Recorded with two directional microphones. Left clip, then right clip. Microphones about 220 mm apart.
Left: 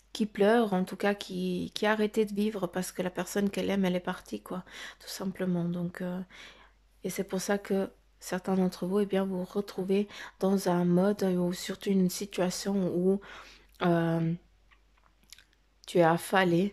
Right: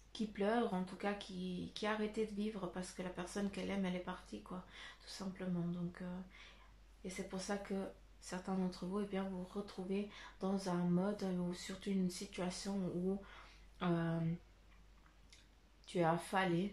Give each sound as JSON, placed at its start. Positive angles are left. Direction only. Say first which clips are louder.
{"t": 0.1, "sound": "speech", "louder": "left 13 dB", "side_deg": 45}
{"t": 15.3, "sound": "chewing", "louder": "left 12 dB", "side_deg": 45}
{"t": 15.8, "sound": "speech", "louder": "left 12 dB", "side_deg": 45}